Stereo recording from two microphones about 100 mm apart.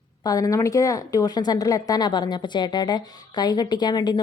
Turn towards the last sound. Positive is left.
turn(degrees=45)  # may be behind; listen again after turning